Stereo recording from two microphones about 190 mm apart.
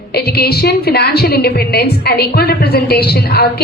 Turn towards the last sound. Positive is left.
turn(degrees=55)  # may be behind; listen again after turning